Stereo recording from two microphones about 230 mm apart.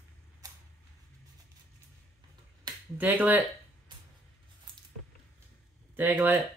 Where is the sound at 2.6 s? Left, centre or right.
Centre.